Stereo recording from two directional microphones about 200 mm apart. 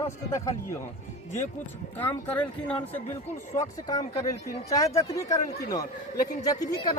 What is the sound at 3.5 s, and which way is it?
Speech, 20° left (ahead or behind).